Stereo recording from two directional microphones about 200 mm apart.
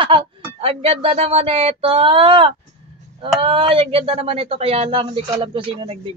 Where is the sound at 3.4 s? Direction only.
25° right (ahead or behind).